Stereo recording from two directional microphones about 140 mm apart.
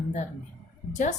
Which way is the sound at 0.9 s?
60° left (ahead or behind).